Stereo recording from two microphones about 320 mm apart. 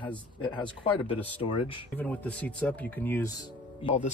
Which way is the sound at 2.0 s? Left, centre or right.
Centre.